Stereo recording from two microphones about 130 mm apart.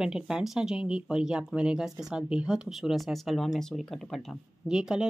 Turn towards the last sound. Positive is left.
turn(degrees=-5)  # may be behind; listen again after turning